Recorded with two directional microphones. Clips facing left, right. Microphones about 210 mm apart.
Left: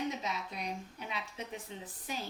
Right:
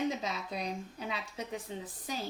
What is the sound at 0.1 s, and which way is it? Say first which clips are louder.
Speech: right 3 dB; 35° right (ahead or behind).